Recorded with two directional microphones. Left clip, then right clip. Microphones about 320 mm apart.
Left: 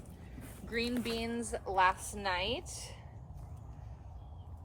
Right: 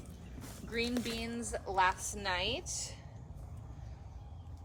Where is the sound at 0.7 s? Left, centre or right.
Left.